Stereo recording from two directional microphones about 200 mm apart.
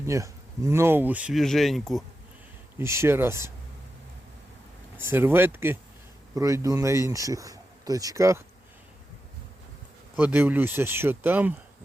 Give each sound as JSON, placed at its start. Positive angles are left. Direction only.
{"t": 0.0, "sound": "speech", "side_deg": -15}
{"t": 2.7, "sound": "speech", "side_deg": -15}
{"t": 4.9, "sound": "speech", "side_deg": -10}
{"t": 10.2, "sound": "speech", "side_deg": -10}